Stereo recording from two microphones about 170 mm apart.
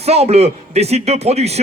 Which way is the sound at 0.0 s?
35° right (ahead or behind).